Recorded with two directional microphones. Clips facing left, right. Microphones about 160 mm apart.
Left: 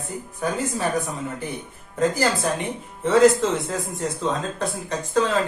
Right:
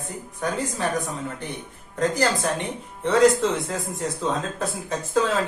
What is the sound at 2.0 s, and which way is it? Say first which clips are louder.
Speech: left 1 dB; 5° left (ahead or behind).